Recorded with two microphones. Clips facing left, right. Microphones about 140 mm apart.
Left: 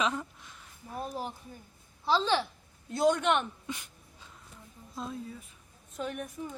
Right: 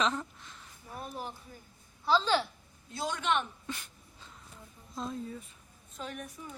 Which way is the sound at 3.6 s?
10° left (ahead or behind).